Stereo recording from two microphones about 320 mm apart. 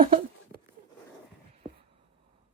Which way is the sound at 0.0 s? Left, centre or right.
Right.